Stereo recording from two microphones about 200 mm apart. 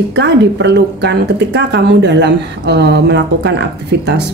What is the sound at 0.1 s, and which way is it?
A woman's voice, 60° right (ahead or behind).